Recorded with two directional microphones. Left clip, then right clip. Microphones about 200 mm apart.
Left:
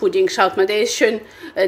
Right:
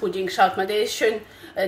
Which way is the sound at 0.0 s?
45° left (ahead or behind).